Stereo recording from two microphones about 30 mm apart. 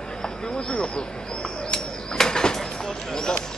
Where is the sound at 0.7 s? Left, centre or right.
Left.